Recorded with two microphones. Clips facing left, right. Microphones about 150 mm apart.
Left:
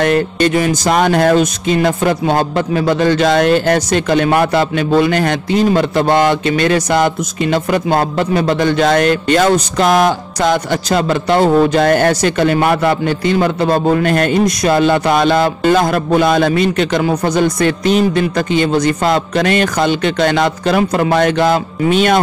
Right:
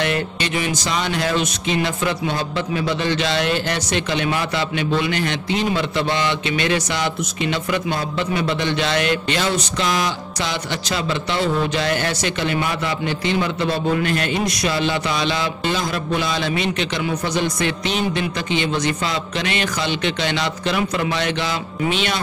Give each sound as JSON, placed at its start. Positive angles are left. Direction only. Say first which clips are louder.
{"t": 0.0, "sound": "speech", "louder": "left 9 dB", "side_deg": 45}